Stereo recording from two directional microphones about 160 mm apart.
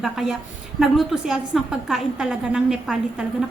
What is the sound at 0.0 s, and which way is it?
A woman's voice, centre (ahead or behind).